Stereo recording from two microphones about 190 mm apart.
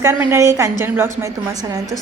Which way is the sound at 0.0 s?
10° right (ahead or behind).